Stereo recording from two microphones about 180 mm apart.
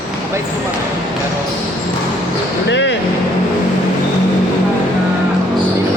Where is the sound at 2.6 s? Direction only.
80° left.